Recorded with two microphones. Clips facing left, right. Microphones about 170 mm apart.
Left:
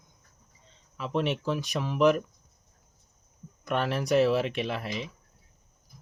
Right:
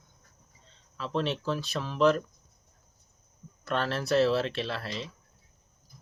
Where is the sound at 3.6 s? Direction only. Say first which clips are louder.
Left 2 dB; 15° left (ahead or behind).